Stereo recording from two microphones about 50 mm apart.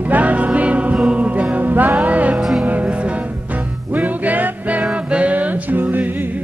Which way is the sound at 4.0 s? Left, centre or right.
Right.